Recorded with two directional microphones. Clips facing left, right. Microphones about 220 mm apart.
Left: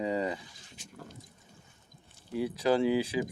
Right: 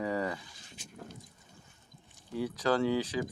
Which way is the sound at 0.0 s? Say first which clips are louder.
Left 2 dB; 20° left (ahead or behind).